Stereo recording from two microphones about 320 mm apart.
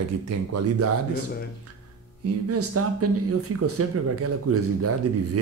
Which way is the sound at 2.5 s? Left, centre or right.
Right.